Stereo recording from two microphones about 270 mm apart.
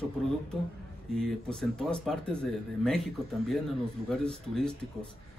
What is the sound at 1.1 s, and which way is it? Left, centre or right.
Speech, centre.